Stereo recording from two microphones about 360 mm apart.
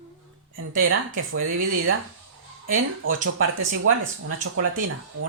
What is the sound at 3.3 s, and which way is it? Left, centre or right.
Speech, right.